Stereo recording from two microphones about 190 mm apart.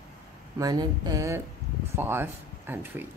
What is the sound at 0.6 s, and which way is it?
A woman's voice, 20° right (ahead or behind).